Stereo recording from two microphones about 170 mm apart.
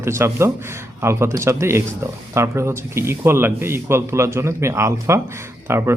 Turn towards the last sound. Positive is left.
turn(degrees=-15)  # may be behind; listen again after turning